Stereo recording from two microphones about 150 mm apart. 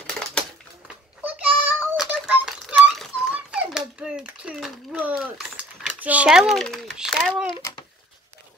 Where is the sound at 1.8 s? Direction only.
10° right (ahead or behind).